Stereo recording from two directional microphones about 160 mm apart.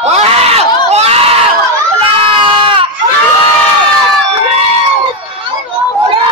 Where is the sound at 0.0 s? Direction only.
40° right (ahead or behind).